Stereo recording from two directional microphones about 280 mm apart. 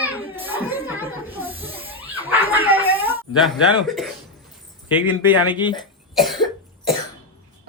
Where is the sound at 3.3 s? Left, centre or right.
Centre.